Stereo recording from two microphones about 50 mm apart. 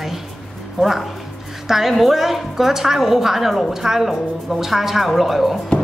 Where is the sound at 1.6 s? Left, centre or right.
Centre.